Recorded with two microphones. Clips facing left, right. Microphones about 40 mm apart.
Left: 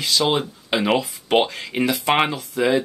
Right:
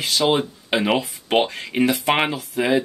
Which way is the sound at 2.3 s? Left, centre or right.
Right.